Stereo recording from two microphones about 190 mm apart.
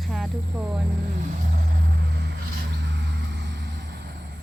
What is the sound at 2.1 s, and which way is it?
Vehicle, 65° right (ahead or behind).